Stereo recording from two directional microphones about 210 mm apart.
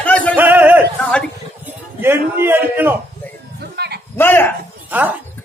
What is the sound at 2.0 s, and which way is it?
Speech, 10° right (ahead or behind).